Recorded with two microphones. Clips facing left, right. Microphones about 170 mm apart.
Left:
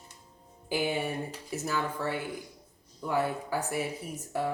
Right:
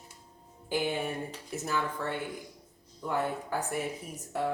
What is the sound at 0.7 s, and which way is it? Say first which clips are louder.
Speech: left 1 dB; 5° left (ahead or behind).